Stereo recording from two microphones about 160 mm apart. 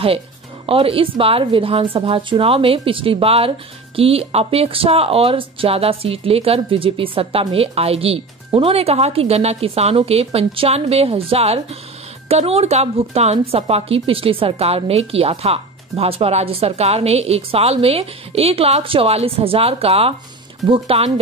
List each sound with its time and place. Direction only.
0.7 s a woman's voice: 35° right (ahead or behind)